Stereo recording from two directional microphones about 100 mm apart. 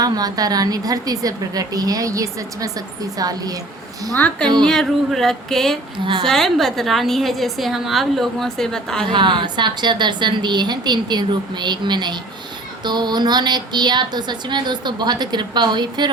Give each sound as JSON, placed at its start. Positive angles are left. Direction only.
{"t": 0.0, "sound": "a woman's voice", "side_deg": -40}
{"t": 4.6, "sound": "a woman's voice", "side_deg": 5}
{"t": 9.0, "sound": "a woman's voice", "side_deg": -50}